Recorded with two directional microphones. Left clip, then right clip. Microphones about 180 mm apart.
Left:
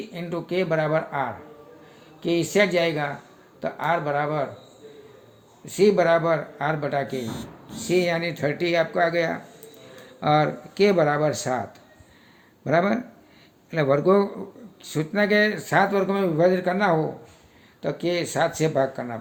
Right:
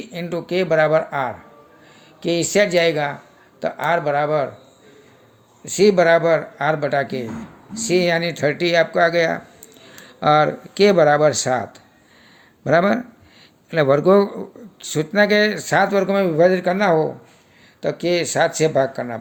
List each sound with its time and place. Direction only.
0.1 s speech: 35° right (ahead or behind)
5.6 s speech: 40° right (ahead or behind)